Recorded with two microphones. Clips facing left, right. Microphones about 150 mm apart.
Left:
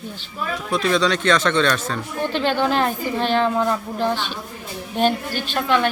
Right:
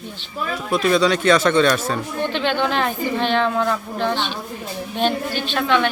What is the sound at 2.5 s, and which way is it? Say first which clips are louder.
A woman's voice: left 1 dB; 5° left (ahead or behind).